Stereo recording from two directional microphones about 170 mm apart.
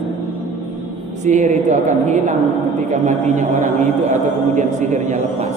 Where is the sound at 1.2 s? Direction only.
45° right (ahead or behind).